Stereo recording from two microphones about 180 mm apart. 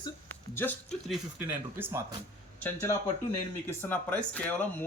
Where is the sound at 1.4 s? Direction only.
15° right (ahead or behind).